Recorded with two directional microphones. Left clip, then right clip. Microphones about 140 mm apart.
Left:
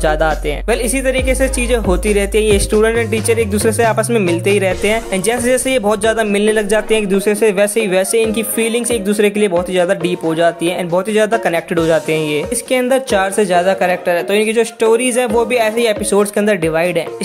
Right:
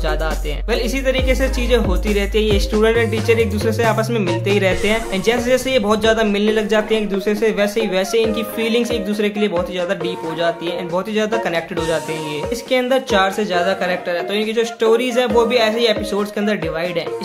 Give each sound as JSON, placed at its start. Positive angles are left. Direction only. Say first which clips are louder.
{"t": 0.0, "sound": "speech", "louder": "left 8 dB", "side_deg": 55}